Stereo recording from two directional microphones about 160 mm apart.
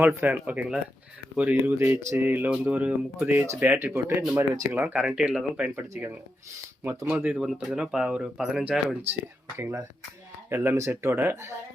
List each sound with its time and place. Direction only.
0.2 s speech: 10° right (ahead or behind)
9.6 s speech: 15° right (ahead or behind)